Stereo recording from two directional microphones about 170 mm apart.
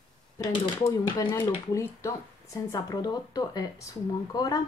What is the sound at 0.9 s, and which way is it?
Speech, 15° left (ahead or behind).